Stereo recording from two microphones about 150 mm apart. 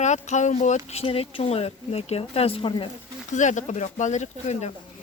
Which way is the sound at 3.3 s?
55° left (ahead or behind).